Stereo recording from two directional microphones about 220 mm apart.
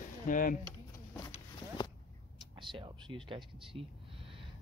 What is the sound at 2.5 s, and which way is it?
Speech, 20° right (ahead or behind).